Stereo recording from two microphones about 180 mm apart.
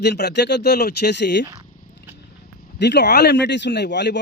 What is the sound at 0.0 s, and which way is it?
Speech, 70° left (ahead or behind).